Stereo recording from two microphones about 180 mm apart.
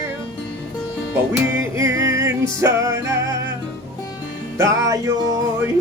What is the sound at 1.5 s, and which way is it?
Music, 15° right (ahead or behind).